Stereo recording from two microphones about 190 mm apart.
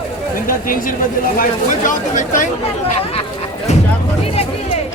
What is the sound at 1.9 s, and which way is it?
Speech, 40° left (ahead or behind).